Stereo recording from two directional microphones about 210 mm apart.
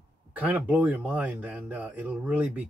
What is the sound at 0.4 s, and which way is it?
Speech, 5° right (ahead or behind).